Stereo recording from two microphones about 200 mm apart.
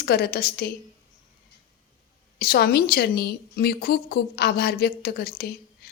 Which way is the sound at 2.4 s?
50° left (ahead or behind).